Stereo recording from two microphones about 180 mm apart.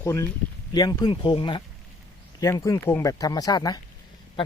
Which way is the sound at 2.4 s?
15° left (ahead or behind).